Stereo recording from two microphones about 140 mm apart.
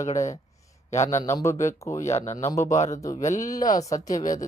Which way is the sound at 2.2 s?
55° left (ahead or behind).